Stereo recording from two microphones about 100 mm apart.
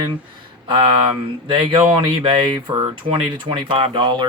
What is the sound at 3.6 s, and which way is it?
Speech, 60° right (ahead or behind).